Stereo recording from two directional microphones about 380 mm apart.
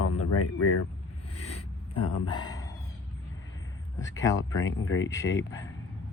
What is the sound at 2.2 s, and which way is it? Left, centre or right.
Speech, centre.